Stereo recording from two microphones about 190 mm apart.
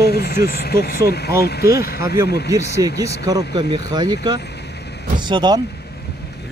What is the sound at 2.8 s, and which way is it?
Speech, 15° right (ahead or behind).